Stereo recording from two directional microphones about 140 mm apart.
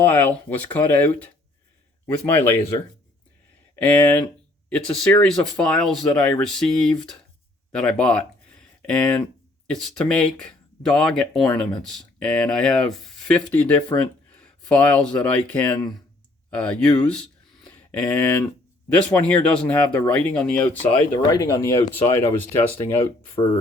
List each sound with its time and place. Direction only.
0.0 s speech: 15° left (ahead or behind)
3.8 s speech: 10° left (ahead or behind)
17.1 s a sound: 5° left (ahead or behind)
19.1 s speech: 10° left (ahead or behind)
21.2 s speech: 25° left (ahead or behind)